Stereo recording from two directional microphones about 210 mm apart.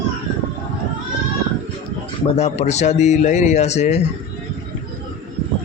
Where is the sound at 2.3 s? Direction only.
30° left (ahead or behind).